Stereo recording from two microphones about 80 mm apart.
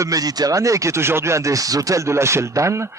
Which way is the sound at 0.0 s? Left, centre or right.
Right.